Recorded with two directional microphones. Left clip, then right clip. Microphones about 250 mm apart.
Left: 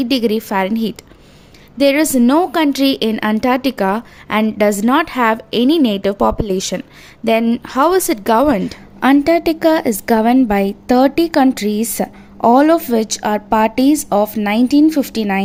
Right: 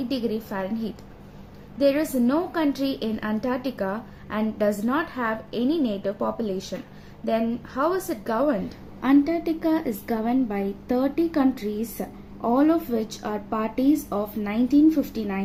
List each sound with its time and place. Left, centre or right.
0.0 s a woman's voice: left